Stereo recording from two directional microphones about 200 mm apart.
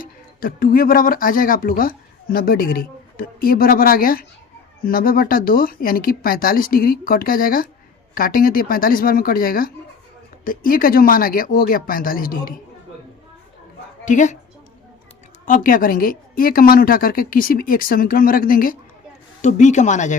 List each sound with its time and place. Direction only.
0.0 s a woman's voice: 45° left (ahead or behind)
14.0 s a woman's voice: 40° left (ahead or behind)
15.4 s a woman's voice: 40° left (ahead or behind)